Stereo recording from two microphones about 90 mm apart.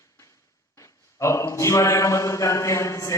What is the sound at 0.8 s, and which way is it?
Mantra, 35° left (ahead or behind).